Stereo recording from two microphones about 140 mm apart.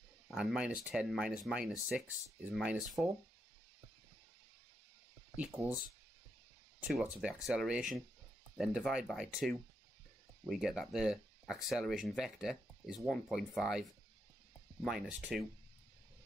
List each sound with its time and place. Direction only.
0.3 s speech: 5° right (ahead or behind)
5.3 s speech: 10° right (ahead or behind)
6.9 s speech: 5° right (ahead or behind)